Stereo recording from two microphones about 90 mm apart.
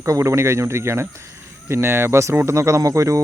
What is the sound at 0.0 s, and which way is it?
Speech, 35° right (ahead or behind).